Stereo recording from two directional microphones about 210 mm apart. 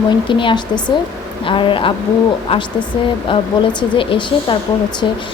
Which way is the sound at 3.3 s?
25° left (ahead or behind).